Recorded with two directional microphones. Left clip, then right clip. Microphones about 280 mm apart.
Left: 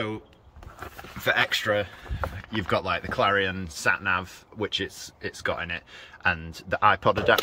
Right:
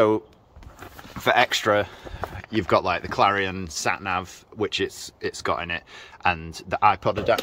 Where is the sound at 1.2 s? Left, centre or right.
Centre.